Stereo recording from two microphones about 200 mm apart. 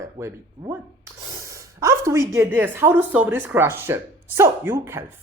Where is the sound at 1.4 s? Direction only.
15° right (ahead or behind).